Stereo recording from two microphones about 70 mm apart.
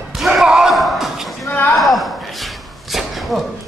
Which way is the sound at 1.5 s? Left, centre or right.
Left.